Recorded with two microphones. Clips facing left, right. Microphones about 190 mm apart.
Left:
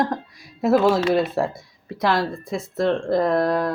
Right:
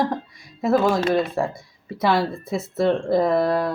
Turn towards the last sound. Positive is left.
turn(degrees=-5)  # may be behind; listen again after turning